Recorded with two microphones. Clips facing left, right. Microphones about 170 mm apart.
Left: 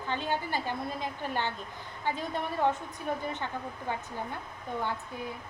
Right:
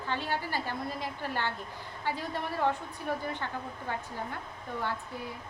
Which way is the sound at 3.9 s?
15° left (ahead or behind).